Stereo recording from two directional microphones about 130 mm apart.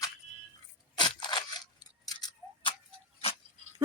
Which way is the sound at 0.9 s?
35° left (ahead or behind).